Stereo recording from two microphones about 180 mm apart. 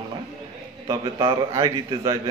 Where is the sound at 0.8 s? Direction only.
25° right (ahead or behind).